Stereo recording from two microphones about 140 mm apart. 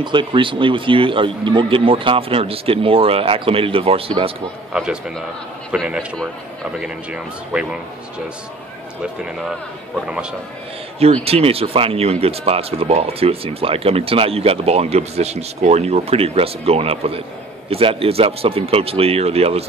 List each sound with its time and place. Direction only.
0.0 s speech: 35° right (ahead or behind)
4.7 s a man's voice: centre (ahead or behind)
11.2 s speech: 45° right (ahead or behind)